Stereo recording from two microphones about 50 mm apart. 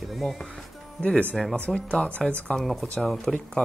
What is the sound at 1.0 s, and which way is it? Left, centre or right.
Speech, left.